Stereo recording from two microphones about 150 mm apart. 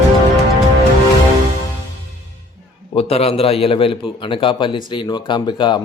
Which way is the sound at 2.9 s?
40° left (ahead or behind).